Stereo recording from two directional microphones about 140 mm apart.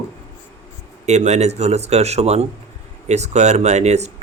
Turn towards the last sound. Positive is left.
turn(degrees=-55)  # may be behind; listen again after turning